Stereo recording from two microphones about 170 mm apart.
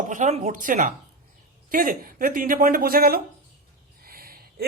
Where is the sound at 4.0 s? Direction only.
60° right (ahead or behind).